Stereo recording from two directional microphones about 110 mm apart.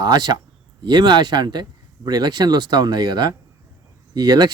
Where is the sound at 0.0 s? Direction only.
40° right (ahead or behind).